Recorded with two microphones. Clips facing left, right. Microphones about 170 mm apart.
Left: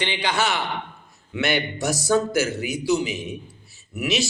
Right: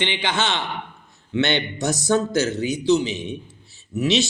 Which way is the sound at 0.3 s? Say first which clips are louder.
Left 1 dB; 25° right (ahead or behind).